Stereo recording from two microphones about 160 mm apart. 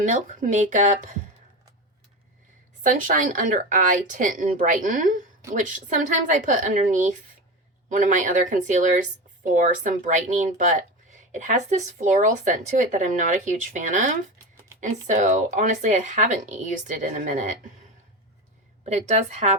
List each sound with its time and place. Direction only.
0.0 s speech: 50° right (ahead or behind)
2.8 s speech: 55° right (ahead or behind)
18.9 s speech: 45° right (ahead or behind)